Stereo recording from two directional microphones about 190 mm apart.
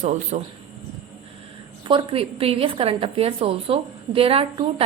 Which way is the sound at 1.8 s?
25° right (ahead or behind).